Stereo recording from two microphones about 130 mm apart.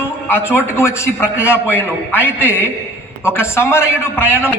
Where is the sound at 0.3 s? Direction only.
20° left (ahead or behind).